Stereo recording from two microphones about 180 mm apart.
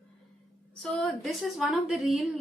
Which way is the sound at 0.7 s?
Centre (ahead or behind).